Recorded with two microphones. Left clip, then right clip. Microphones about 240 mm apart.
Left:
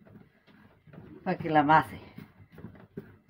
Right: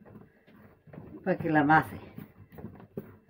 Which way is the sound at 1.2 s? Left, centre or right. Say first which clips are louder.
Left 1 dB; centre.